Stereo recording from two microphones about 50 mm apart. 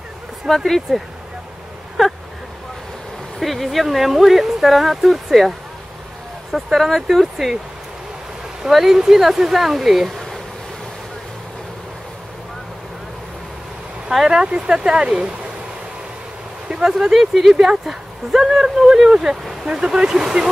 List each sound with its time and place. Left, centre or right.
0.5 s speech: centre
3.3 s speech: centre
6.5 s speech: centre
8.6 s speech: centre
14.1 s speech: centre
16.8 s speech: centre